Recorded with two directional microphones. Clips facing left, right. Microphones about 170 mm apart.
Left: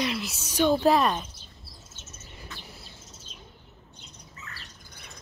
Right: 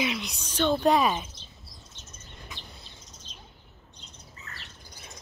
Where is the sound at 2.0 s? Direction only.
5° left (ahead or behind).